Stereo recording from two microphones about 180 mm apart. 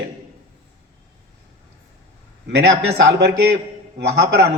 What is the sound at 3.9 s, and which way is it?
Speech, 70° right (ahead or behind).